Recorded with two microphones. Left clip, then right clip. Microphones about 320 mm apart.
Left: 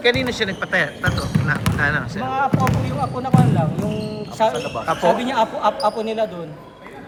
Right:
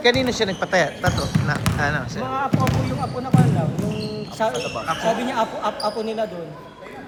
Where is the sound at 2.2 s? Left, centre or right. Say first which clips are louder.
Left 3 dB; left.